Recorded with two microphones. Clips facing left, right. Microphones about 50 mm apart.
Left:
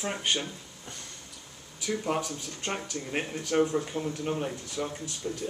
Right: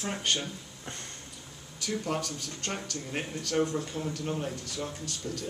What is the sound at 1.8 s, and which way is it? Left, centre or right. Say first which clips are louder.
Speech: left 2 dB; centre.